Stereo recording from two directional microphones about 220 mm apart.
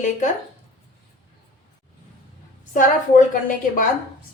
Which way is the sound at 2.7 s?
35° left (ahead or behind).